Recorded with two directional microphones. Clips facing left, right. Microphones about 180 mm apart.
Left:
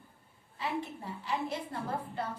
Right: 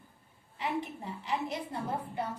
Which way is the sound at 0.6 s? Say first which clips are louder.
Right 1 dB; 20° right (ahead or behind).